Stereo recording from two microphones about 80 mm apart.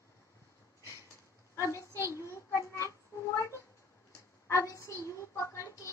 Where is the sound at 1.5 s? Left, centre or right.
Left.